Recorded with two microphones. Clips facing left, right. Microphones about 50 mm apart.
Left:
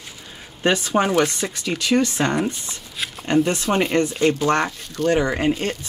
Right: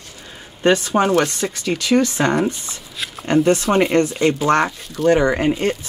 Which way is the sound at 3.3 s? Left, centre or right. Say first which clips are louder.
Right 4 dB; centre.